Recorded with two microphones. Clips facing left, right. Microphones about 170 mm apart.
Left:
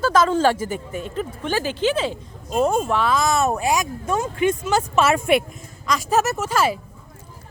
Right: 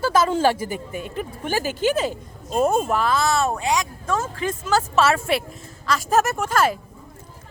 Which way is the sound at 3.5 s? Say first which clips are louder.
Left 2 dB; 25° left (ahead or behind).